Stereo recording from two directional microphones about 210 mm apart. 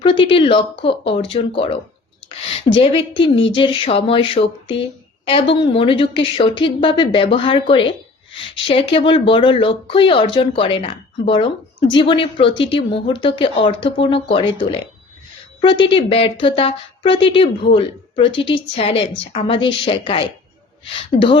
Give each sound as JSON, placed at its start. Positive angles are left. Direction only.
{"t": 0.0, "sound": "a woman's voice", "side_deg": 25}